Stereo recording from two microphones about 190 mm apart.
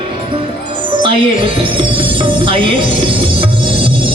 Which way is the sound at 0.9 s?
25° right (ahead or behind).